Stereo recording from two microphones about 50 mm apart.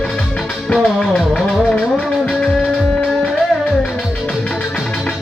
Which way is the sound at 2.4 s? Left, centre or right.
Centre.